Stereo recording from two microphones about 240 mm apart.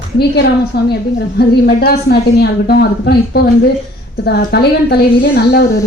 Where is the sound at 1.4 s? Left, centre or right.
Left.